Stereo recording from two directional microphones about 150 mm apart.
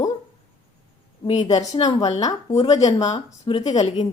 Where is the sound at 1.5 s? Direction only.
25° left (ahead or behind).